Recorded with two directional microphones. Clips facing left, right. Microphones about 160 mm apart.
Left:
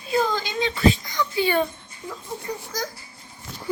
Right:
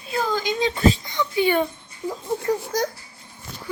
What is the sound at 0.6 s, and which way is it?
Speech, 45° right (ahead or behind).